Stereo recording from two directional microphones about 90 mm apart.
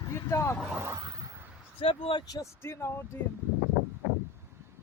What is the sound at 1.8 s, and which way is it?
Speech, 85° left.